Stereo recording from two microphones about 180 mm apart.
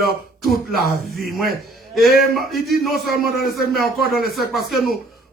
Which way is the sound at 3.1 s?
60° left (ahead or behind).